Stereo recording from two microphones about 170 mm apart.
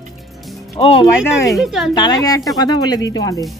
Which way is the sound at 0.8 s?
35° left (ahead or behind).